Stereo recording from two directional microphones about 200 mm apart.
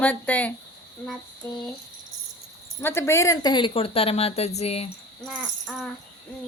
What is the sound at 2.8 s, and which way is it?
Speech, 10° left (ahead or behind).